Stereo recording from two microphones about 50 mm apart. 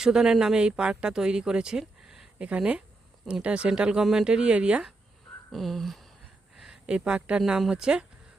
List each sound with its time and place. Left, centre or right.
0.0 s speech: centre
1.8 s a sound: centre
2.4 s speech: right
5.5 s a sound: centre
6.8 s speech: right
7.4 s speech: centre